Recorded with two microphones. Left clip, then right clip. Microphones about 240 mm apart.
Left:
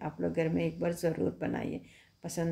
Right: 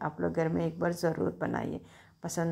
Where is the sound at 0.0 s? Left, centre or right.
Centre.